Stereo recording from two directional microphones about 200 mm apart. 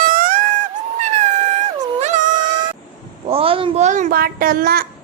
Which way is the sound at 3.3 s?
25° right (ahead or behind).